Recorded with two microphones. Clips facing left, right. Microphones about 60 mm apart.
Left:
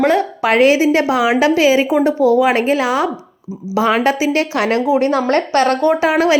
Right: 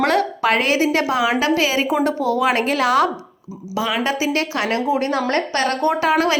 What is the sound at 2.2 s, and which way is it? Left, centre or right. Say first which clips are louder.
Speech: left 8 dB; right.